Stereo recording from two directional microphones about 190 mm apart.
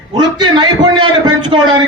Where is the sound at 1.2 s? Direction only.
20° right (ahead or behind).